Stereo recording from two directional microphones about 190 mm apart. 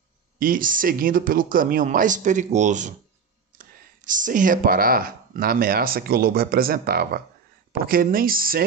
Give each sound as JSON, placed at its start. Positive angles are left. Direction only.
{"t": 0.4, "sound": "speech", "side_deg": -45}